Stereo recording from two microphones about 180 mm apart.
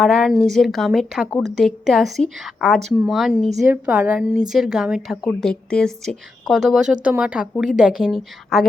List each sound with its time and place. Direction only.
0.0 s a woman's voice: centre (ahead or behind)